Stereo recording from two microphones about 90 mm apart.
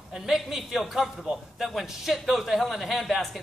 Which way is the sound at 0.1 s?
5° right (ahead or behind).